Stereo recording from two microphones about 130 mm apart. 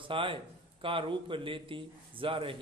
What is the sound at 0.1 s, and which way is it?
Speech, 45° right (ahead or behind).